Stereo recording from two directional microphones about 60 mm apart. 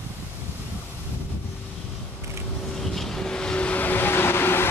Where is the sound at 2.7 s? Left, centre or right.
Centre.